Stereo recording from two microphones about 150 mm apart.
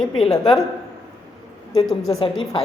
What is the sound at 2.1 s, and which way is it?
Speech, 40° left (ahead or behind).